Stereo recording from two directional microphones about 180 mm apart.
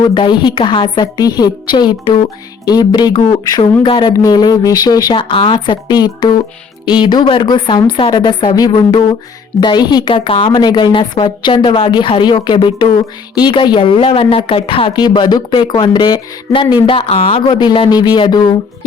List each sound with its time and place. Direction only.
0.1 s speech: 25° left (ahead or behind)